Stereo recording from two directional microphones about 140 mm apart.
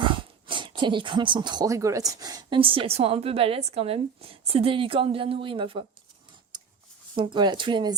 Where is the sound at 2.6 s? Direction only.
40° right (ahead or behind).